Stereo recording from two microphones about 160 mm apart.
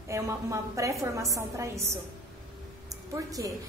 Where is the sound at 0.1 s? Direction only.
20° right (ahead or behind).